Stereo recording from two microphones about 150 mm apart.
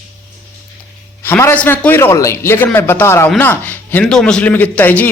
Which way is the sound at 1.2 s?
15° left (ahead or behind).